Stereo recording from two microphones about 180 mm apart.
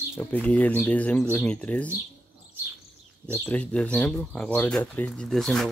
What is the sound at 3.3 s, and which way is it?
Speech, 10° left (ahead or behind).